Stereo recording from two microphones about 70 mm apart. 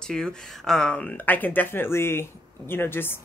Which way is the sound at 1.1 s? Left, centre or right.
Left.